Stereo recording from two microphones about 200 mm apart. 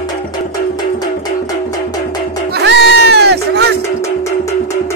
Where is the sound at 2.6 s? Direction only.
55° right (ahead or behind).